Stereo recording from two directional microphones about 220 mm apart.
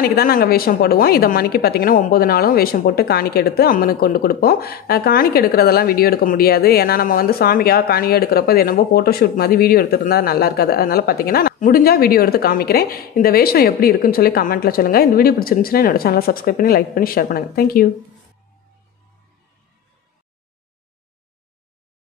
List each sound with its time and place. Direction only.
0.0 s a woman's voice: 40° left (ahead or behind)